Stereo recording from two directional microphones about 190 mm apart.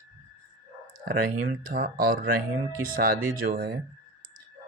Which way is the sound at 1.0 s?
50° right (ahead or behind).